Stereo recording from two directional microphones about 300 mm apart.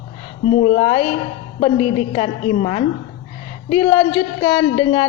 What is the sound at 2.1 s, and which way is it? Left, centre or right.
Speech, centre.